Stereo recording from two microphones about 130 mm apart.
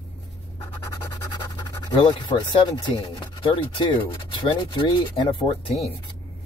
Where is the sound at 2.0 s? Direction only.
40° left (ahead or behind).